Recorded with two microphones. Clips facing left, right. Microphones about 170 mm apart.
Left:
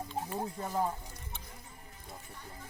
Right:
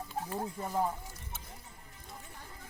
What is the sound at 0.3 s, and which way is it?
Speech, centre (ahead or behind).